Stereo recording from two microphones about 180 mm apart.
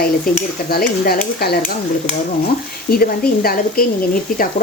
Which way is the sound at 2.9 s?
55° left (ahead or behind).